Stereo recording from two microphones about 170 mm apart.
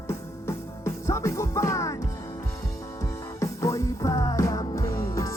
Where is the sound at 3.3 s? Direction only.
20° left (ahead or behind).